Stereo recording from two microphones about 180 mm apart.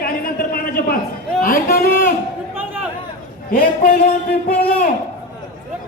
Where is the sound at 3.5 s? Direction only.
55° left (ahead or behind).